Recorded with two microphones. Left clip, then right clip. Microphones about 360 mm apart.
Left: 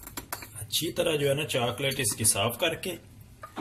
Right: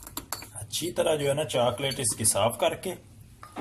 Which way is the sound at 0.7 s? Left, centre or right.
Centre.